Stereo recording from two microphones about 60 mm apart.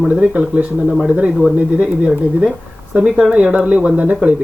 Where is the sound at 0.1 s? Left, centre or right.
Right.